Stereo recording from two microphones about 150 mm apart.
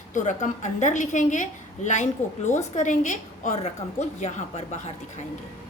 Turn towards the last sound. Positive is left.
turn(degrees=50)  # may be behind; listen again after turning